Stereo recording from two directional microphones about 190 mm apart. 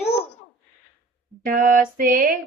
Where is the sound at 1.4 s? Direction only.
45° right (ahead or behind).